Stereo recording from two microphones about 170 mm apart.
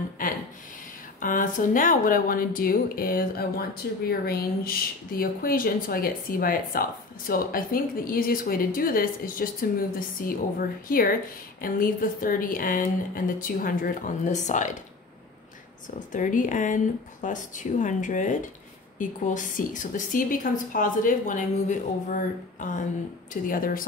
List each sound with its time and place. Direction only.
0.2 s a sound: 50° left (ahead or behind)
1.2 s speech: 50° left (ahead or behind)
16.1 s a woman's voice: 50° left (ahead or behind)